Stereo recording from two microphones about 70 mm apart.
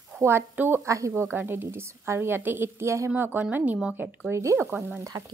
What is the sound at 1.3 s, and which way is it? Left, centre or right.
A woman's voice, right.